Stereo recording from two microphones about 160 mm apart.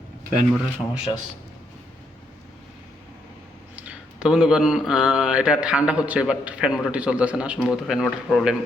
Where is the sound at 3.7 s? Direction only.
5° right (ahead or behind).